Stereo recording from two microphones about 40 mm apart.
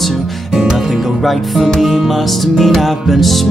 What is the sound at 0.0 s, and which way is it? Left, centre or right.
Music, centre.